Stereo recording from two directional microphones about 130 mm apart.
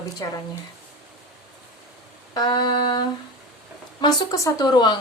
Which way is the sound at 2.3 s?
30° left (ahead or behind).